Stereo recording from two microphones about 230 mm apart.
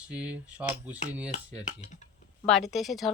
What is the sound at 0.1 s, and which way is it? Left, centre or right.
Speech, centre.